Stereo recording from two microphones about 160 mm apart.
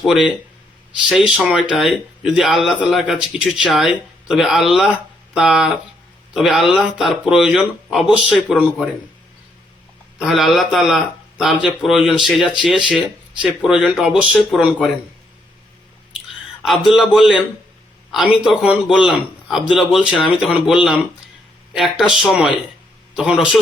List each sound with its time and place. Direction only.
0.0 s speech: centre (ahead or behind)
1.3 s speech: 5° right (ahead or behind)
10.2 s speech: centre (ahead or behind)
16.6 s speech: centre (ahead or behind)